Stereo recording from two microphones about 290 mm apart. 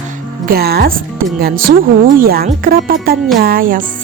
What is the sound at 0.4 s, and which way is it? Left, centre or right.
Speech, right.